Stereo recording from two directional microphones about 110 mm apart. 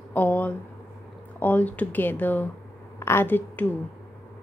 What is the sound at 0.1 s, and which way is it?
A woman's voice, 15° left (ahead or behind).